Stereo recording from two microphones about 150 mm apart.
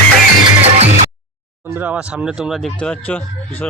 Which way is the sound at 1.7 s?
10° right (ahead or behind).